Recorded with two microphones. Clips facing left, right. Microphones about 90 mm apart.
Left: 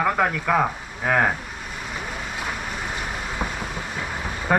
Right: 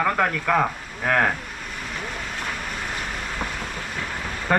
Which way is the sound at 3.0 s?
10° left (ahead or behind).